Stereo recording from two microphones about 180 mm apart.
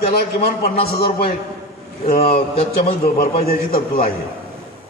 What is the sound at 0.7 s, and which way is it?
A man's voice, 35° left (ahead or behind).